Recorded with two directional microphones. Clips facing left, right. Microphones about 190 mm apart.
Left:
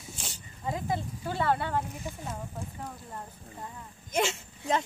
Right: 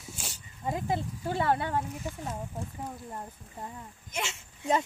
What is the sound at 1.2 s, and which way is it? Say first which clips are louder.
Speech: even; 20° right (ahead or behind).